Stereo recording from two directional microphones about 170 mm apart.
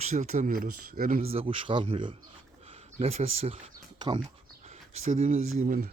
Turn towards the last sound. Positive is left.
turn(degrees=-40)  # may be behind; listen again after turning